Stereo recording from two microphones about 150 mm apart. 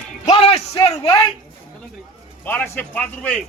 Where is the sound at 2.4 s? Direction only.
10° left (ahead or behind).